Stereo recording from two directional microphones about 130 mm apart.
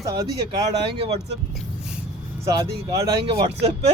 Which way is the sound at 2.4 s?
30° right (ahead or behind).